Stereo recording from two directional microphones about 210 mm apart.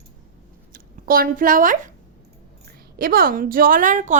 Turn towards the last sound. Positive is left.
turn(degrees=-35)  # may be behind; listen again after turning